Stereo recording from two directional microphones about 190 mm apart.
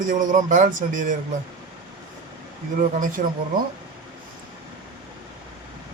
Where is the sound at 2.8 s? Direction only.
45° right (ahead or behind).